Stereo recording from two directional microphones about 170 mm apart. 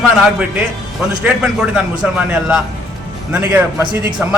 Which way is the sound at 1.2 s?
5° right (ahead or behind).